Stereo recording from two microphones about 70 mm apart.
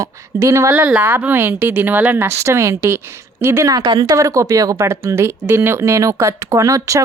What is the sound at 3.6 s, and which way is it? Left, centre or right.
Speech, right.